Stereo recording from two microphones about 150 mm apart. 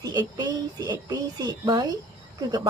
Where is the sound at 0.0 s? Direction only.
25° right (ahead or behind).